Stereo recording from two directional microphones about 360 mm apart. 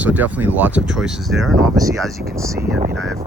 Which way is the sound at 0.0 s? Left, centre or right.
Centre.